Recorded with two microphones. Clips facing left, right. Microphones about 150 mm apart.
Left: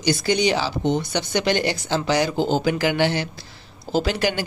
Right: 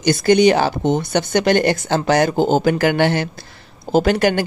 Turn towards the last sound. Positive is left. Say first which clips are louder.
# right 7 dB
turn(degrees=-55)  # may be behind; listen again after turning